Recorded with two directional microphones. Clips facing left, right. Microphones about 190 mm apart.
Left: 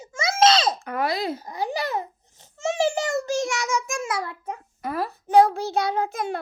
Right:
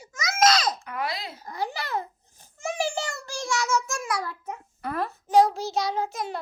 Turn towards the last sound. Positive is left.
turn(degrees=55)  # may be behind; listen again after turning